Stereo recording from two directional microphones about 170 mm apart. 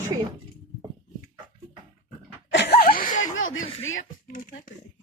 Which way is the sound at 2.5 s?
85° left.